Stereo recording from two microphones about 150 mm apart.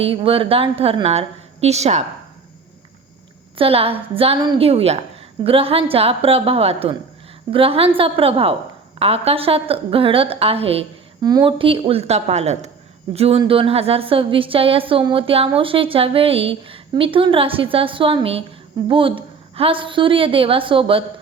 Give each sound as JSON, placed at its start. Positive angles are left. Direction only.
{"t": 0.0, "sound": "a woman's voice", "side_deg": -40}
{"t": 3.6, "sound": "a woman's voice", "side_deg": -40}
{"t": 11.2, "sound": "a woman's voice", "side_deg": -25}